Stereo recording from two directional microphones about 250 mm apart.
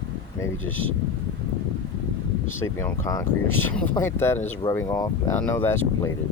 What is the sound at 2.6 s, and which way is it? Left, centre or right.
Speech, centre.